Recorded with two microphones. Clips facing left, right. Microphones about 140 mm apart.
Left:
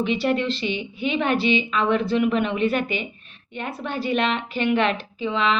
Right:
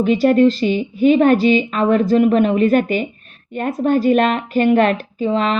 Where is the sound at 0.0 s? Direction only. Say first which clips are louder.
Right 10 dB; 45° right (ahead or behind).